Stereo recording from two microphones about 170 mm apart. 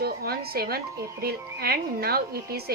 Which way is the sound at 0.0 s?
65° right (ahead or behind).